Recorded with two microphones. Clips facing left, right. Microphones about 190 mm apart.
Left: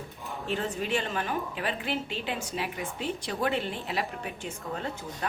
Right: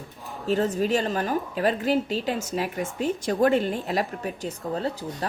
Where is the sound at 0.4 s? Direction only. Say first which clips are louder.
Right 8 dB; 40° right (ahead or behind).